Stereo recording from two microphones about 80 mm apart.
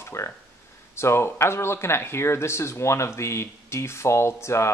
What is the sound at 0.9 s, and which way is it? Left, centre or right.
Speech, left.